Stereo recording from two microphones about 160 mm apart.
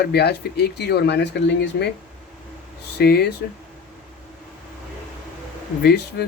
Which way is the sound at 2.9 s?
80° left.